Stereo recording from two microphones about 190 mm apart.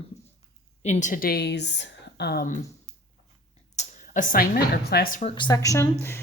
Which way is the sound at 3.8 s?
45° left (ahead or behind).